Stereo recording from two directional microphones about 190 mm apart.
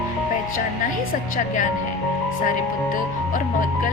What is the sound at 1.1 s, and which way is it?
Speech, 45° left (ahead or behind).